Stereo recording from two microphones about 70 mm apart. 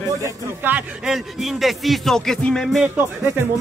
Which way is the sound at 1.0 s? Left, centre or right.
Centre.